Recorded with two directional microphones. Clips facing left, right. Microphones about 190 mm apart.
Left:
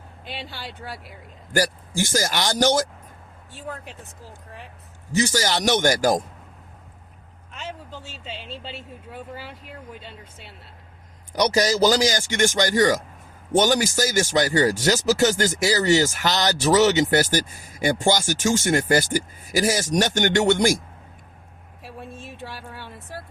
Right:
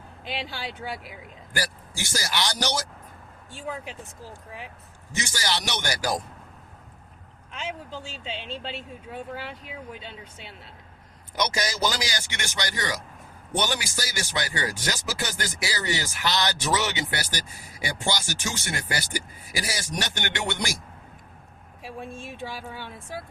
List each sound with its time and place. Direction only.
0.3 s speech: centre (ahead or behind)
1.5 s speech: 45° left (ahead or behind)
3.5 s speech: centre (ahead or behind)
5.1 s speech: 40° left (ahead or behind)
7.5 s speech: centre (ahead or behind)
11.3 s speech: 40° left (ahead or behind)
21.8 s speech: centre (ahead or behind)